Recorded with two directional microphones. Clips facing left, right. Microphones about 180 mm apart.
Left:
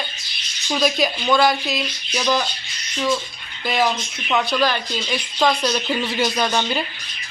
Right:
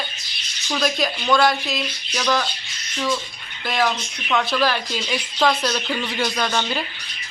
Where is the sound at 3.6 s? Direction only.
5° left (ahead or behind).